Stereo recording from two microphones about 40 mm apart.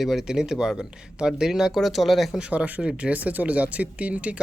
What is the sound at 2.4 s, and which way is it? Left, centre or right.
Speech, right.